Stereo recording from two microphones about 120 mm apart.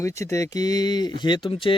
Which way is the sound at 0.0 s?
25° left (ahead or behind).